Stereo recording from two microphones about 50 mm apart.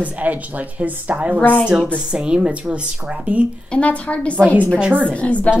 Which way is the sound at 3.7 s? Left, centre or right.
Left.